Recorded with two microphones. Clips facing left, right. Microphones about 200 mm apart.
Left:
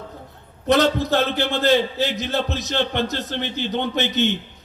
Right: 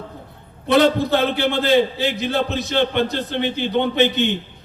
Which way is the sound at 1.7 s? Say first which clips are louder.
Right 5 dB; 55° right (ahead or behind).